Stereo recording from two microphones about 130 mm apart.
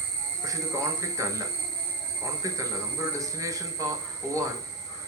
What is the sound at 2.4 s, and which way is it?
Speech, 25° right (ahead or behind).